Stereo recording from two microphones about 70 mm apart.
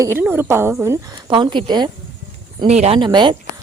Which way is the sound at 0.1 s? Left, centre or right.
Right.